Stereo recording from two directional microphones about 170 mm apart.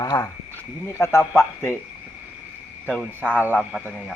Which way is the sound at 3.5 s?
5° left (ahead or behind).